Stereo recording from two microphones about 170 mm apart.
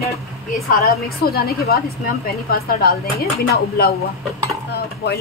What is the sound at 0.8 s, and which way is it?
A woman's voice, 65° left (ahead or behind).